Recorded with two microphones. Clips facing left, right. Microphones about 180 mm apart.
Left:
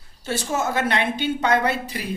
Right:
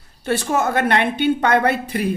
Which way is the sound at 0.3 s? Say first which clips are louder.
Right 5 dB; 60° right (ahead or behind).